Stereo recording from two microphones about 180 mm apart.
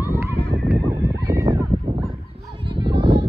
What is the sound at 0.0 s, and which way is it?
Horse, 15° right (ahead or behind).